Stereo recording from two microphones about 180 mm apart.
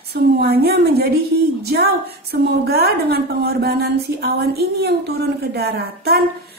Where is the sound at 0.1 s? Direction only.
60° right (ahead or behind).